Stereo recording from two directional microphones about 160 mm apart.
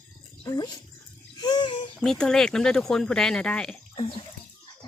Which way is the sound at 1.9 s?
5° left (ahead or behind).